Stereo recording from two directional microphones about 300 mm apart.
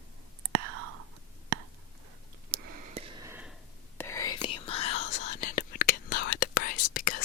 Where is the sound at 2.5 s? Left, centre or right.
Centre.